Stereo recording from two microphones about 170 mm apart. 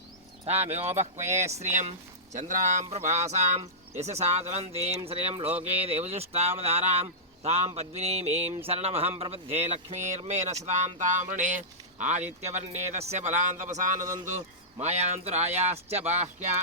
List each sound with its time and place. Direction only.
0.4 s speech: 40° right (ahead or behind)
1.2 s speech: 15° right (ahead or behind)
1.5 s speech: 40° right (ahead or behind)